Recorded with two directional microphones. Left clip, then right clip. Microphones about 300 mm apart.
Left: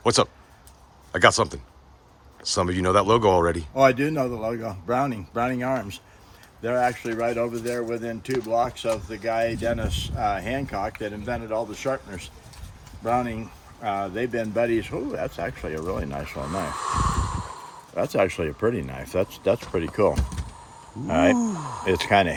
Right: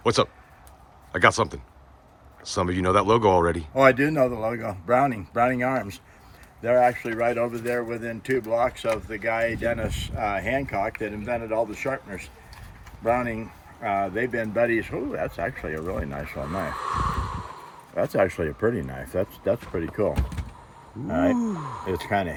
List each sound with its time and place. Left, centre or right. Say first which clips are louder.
0.0 s speech: left 1 dB; centre
21.1 s speech: left 3 dB; centre